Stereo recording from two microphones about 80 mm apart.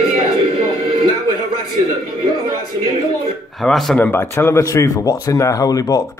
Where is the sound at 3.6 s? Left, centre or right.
Centre.